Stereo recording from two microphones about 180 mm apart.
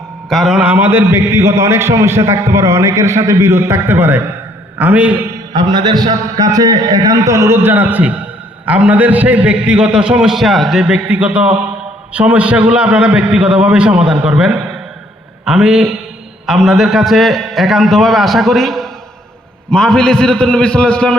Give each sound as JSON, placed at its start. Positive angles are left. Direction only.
{"t": 0.3, "sound": "a man's voice", "side_deg": 0}
{"t": 5.5, "sound": "a man's voice", "side_deg": -25}